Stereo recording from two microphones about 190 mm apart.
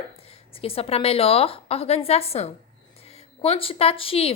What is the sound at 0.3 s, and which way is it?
A woman's voice, 30° left (ahead or behind).